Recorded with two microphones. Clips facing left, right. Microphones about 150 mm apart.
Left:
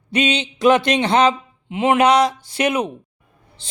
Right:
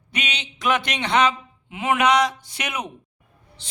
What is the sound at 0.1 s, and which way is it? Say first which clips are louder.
Speech: left 12 dB; 30° left (ahead or behind).